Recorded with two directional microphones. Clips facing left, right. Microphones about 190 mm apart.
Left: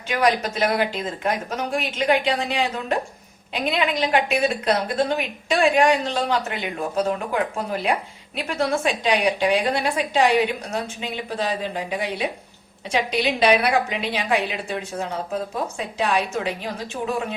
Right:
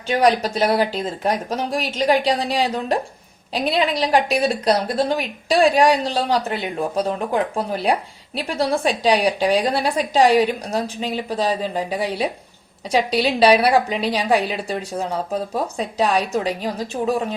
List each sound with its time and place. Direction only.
0.1 s a woman's voice: 35° right (ahead or behind)